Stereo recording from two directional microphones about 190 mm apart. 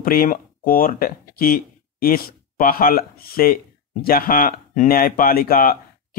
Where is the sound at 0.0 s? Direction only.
50° left (ahead or behind).